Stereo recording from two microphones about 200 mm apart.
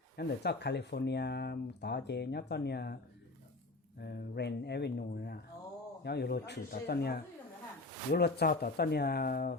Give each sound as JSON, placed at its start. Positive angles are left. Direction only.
{"t": 0.2, "sound": "speech", "side_deg": 55}
{"t": 4.0, "sound": "speech", "side_deg": 55}